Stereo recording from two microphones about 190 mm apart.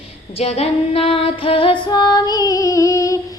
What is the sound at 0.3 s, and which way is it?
Female singing, 35° left (ahead or behind).